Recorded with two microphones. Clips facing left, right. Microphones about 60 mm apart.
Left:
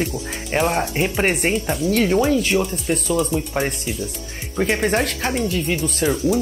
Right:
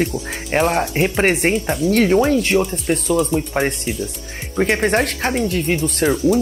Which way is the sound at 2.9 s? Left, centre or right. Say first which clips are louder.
Right 3 dB; right.